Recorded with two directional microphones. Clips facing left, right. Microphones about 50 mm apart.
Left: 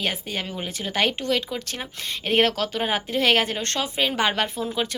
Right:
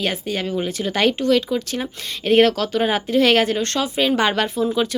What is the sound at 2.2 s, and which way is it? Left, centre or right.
Speech, left.